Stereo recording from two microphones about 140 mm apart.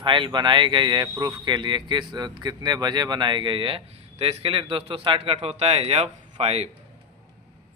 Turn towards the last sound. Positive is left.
turn(degrees=-50)  # may be behind; listen again after turning